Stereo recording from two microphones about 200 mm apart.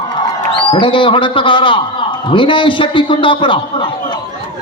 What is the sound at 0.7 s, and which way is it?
A man's voice, 25° left (ahead or behind).